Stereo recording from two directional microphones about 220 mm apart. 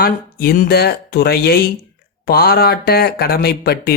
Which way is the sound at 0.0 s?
45° left (ahead or behind).